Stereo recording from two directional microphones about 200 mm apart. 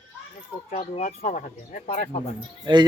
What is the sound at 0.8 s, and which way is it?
Speech, 35° left (ahead or behind).